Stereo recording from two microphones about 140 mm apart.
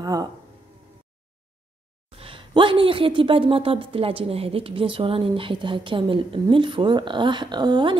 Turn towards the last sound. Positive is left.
turn(degrees=-30)  # may be behind; listen again after turning